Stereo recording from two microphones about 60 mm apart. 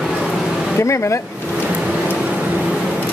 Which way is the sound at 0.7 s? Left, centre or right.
Left.